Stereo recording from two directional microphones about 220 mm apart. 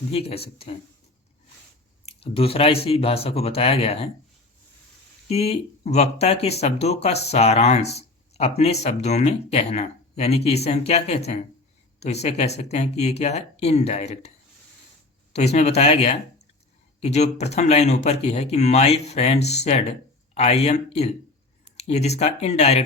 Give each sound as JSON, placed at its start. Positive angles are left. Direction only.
{"t": 0.1, "sound": "speech", "side_deg": 25}
{"t": 2.0, "sound": "speech", "side_deg": 25}
{"t": 5.3, "sound": "speech", "side_deg": 30}
{"t": 15.3, "sound": "speech", "side_deg": 30}